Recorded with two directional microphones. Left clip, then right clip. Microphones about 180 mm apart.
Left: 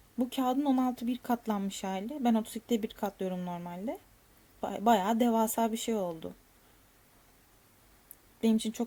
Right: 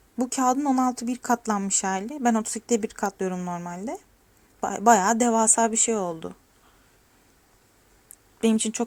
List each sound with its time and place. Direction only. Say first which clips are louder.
0.2 s speech: right 7 dB; 5° right (ahead or behind)
1.2 s speech: right 10 dB; 15° right (ahead or behind)
8.4 s speech: right 7 dB; 10° right (ahead or behind)